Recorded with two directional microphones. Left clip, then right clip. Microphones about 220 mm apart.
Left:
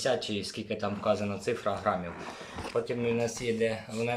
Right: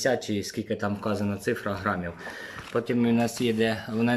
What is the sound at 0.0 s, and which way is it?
Speech, 30° right (ahead or behind).